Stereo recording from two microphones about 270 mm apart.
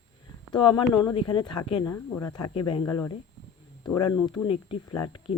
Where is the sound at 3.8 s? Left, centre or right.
Left.